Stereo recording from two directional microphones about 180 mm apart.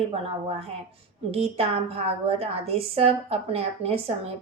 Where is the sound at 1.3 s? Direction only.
35° right (ahead or behind).